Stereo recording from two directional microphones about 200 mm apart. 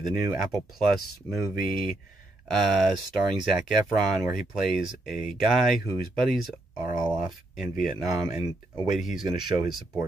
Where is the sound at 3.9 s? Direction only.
20° right (ahead or behind).